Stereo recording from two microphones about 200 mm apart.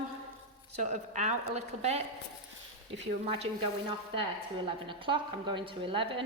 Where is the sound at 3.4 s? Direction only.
25° right (ahead or behind).